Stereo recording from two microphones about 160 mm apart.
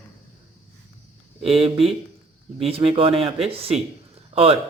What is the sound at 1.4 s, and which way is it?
Speech, 35° right (ahead or behind).